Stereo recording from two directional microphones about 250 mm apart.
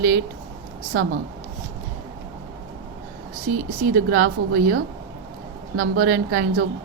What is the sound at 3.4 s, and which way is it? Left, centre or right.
Speech, right.